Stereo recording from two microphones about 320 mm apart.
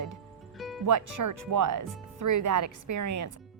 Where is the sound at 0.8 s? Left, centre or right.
Right.